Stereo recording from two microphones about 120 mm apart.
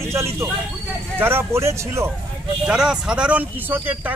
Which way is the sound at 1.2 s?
20° right (ahead or behind).